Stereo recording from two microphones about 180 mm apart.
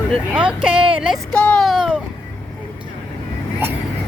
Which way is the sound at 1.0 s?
5° left (ahead or behind).